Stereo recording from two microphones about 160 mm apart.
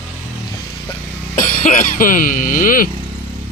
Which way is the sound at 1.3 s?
55° left (ahead or behind).